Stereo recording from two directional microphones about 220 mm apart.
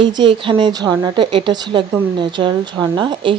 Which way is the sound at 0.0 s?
20° right (ahead or behind).